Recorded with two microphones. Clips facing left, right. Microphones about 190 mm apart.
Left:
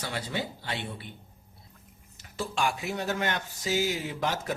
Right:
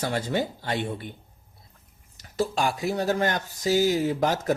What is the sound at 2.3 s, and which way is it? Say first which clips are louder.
Speech: right 5 dB; 40° right (ahead or behind).